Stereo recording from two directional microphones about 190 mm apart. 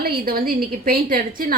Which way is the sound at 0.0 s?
50° right (ahead or behind).